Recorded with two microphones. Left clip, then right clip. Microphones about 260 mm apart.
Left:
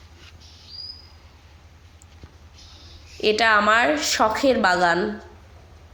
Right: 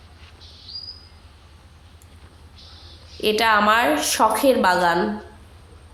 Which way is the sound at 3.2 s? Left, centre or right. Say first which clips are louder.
Even; right.